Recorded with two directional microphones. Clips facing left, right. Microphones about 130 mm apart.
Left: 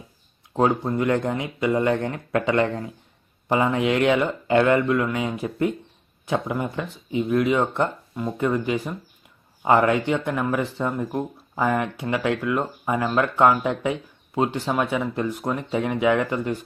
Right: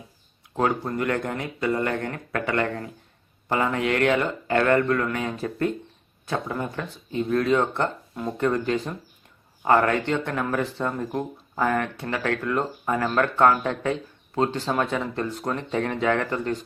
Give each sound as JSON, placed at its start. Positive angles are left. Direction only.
{"t": 0.5, "sound": "speech", "side_deg": 20}